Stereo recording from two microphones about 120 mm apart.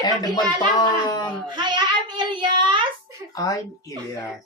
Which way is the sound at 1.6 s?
35° right (ahead or behind).